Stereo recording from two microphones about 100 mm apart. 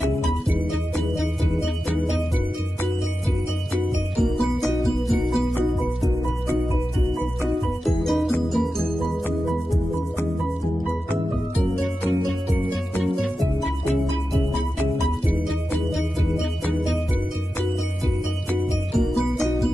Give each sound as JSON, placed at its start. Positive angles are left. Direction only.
{"t": 4.2, "sound": "music", "side_deg": 0}
{"t": 7.6, "sound": "music", "side_deg": 0}
{"t": 13.0, "sound": "music", "side_deg": 0}
{"t": 15.2, "sound": "music", "side_deg": 0}
{"t": 18.9, "sound": "music", "side_deg": 0}